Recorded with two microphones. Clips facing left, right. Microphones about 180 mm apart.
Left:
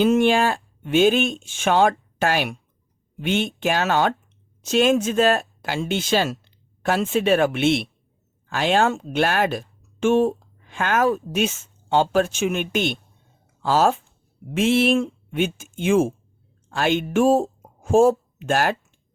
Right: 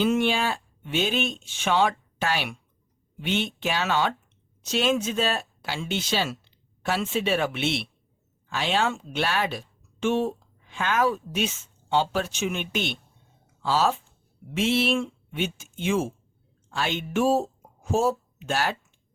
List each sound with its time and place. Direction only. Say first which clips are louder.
0.0 s speech: left 6 dB; 45° left (ahead or behind)